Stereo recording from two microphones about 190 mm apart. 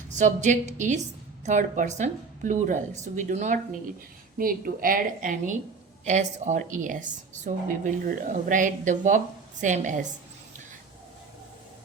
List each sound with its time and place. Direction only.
0.1 s a woman's voice: 40° right (ahead or behind)